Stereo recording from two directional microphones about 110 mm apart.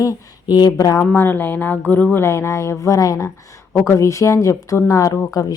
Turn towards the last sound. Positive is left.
turn(degrees=30)  # may be behind; listen again after turning